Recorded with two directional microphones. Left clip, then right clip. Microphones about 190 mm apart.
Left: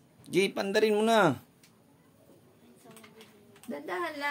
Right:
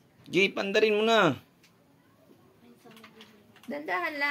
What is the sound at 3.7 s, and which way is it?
Speech, 20° right (ahead or behind).